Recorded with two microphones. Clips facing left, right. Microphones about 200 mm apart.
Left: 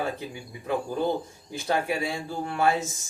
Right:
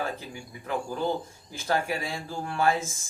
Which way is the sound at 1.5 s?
20° left (ahead or behind).